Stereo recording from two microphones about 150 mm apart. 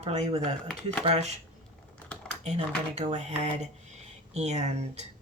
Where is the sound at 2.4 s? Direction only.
45° right (ahead or behind).